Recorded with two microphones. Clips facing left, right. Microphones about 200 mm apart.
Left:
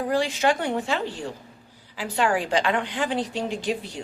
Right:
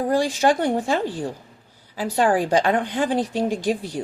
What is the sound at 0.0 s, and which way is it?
A woman's voice, 45° right (ahead or behind).